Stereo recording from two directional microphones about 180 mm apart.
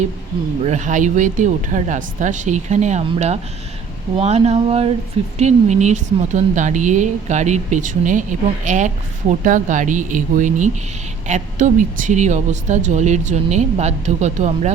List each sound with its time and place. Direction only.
0.6 s speech: 40° right (ahead or behind)